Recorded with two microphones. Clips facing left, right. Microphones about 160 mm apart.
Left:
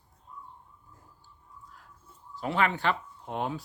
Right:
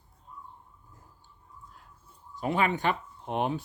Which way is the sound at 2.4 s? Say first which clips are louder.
Right 1 dB; 15° right (ahead or behind).